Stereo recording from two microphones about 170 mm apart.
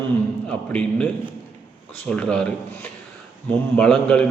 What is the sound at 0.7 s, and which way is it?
Speech, 5° left (ahead or behind).